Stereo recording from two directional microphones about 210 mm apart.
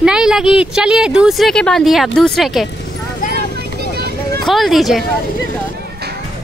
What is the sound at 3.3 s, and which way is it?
Vehicle, 50° right (ahead or behind).